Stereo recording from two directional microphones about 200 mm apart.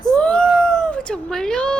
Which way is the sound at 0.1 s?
5° left (ahead or behind).